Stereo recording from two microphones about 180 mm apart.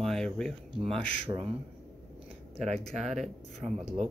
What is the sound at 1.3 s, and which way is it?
Speech, 20° right (ahead or behind).